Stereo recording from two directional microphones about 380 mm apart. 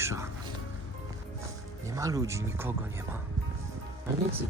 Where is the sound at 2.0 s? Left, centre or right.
Centre.